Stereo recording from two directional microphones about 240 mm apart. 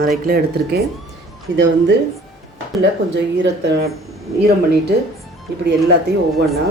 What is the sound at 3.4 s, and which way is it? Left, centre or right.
Speech, right.